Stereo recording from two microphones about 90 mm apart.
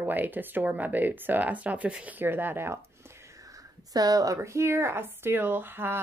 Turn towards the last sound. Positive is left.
turn(degrees=-25)  # may be behind; listen again after turning